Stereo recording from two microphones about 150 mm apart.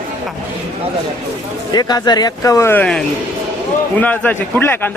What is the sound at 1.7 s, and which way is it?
A man's voice, 25° left (ahead or behind).